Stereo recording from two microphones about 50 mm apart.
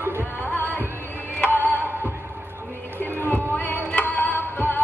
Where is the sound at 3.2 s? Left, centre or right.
Left.